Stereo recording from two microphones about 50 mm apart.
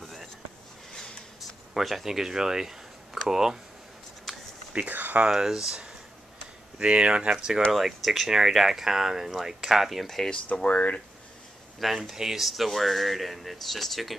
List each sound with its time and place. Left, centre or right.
0.0 s a sound: centre
1.7 s speech: centre
4.7 s speech: right
5.2 s speech: centre
10.3 s speech: left
11.8 s speech: centre